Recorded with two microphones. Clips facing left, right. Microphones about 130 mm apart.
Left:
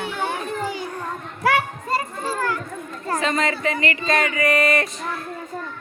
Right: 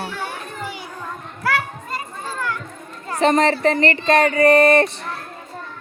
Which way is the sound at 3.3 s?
35° right (ahead or behind).